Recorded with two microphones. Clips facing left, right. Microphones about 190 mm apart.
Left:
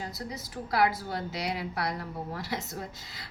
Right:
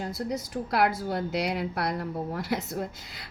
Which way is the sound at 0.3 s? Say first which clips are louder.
Right 1 dB; 45° right (ahead or behind).